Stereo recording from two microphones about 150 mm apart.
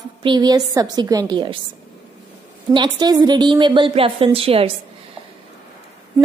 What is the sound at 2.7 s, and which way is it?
A woman's voice, 30° right (ahead or behind).